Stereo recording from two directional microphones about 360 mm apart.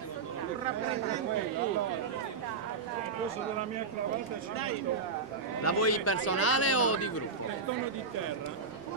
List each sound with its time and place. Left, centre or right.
5.6 s speech: left